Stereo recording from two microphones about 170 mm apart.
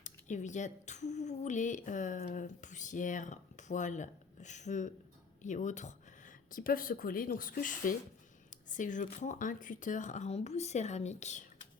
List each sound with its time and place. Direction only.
0.0 s a woman's voice: 45° left (ahead or behind)